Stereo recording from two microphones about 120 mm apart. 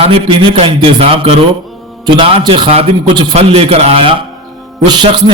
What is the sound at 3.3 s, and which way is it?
Speech, 55° right (ahead or behind).